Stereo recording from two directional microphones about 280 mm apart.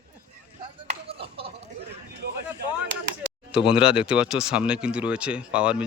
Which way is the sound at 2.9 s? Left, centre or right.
Right.